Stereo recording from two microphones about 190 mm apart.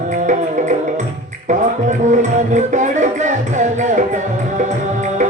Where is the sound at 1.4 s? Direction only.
40° right (ahead or behind).